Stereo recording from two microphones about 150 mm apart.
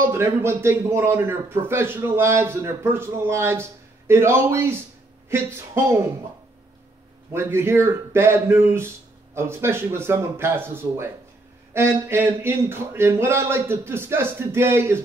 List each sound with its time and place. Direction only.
0.1 s speech: 15° right (ahead or behind)
7.3 s speech: 15° right (ahead or behind)